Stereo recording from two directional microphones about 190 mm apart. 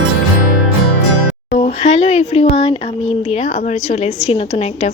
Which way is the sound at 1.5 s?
40° left (ahead or behind).